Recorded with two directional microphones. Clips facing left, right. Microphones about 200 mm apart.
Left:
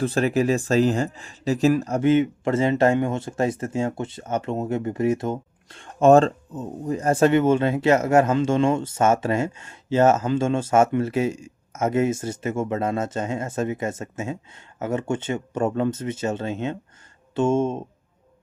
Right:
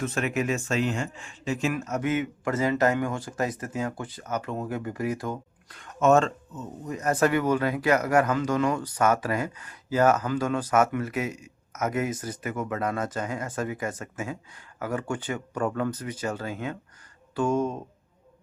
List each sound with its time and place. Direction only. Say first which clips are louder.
0.0 s speech: left 7 dB; 35° left (ahead or behind)